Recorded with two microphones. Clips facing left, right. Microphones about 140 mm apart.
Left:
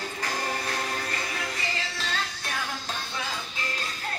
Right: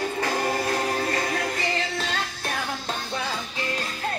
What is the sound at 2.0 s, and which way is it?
Music, 50° right (ahead or behind).